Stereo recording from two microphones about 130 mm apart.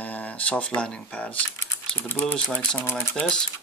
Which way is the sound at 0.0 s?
10° left (ahead or behind).